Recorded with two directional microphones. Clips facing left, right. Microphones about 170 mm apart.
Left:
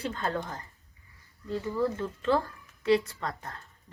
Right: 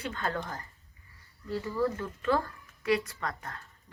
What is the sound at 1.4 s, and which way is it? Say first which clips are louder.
Speech: left 1 dB; 20° left (ahead or behind).